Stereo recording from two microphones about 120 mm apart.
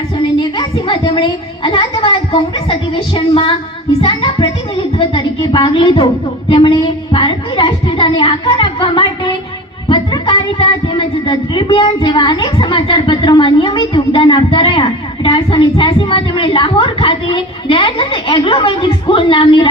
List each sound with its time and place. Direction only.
0.3 s speech: 45° left (ahead or behind)